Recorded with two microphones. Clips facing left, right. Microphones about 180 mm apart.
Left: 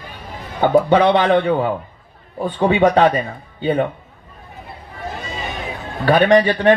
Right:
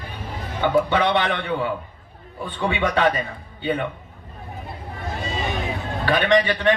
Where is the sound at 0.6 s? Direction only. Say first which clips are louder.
Left 6 dB; 40° left (ahead or behind).